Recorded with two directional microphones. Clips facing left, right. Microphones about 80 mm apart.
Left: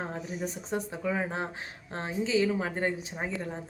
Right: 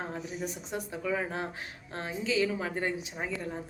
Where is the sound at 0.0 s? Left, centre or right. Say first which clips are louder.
Left 1 dB; left.